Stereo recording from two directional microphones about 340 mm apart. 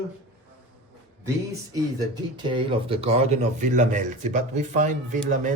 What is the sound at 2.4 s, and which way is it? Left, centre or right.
Speech, centre.